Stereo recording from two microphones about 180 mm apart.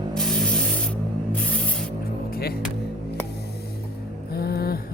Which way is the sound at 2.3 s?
60° left (ahead or behind).